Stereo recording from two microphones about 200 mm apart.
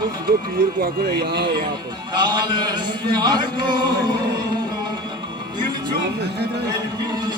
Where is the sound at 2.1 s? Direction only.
20° right (ahead or behind).